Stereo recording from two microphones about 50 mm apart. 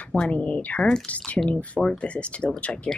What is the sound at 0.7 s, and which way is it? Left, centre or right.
Speech, centre.